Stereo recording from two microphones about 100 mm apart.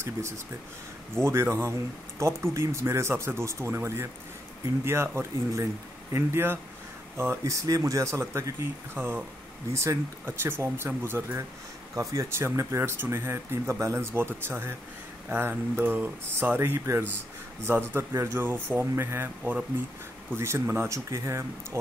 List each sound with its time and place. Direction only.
1.2 s speech: 25° right (ahead or behind)